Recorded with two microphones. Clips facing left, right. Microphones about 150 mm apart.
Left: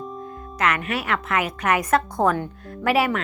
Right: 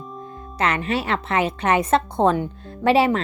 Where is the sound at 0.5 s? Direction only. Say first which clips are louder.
Right 2 dB; 30° right (ahead or behind).